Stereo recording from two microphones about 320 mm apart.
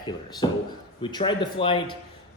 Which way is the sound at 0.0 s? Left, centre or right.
Centre.